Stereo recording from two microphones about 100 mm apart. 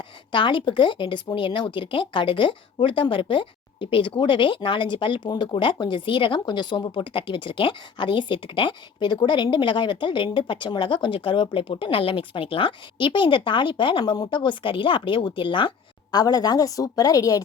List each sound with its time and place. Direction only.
0.3 s speech: 55° left (ahead or behind)
14.0 s speech: 45° left (ahead or behind)
16.1 s a woman's voice: 40° left (ahead or behind)